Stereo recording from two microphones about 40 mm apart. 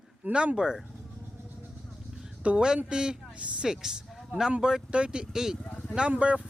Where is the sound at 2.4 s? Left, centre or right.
Right.